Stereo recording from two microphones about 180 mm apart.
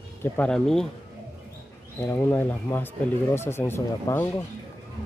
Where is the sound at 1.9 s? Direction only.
10° left (ahead or behind).